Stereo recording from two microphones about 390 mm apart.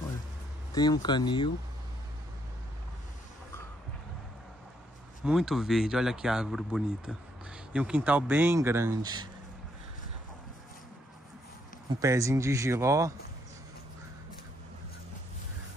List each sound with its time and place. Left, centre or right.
0.7 s speech: centre
5.2 s speech: centre
11.9 s speech: centre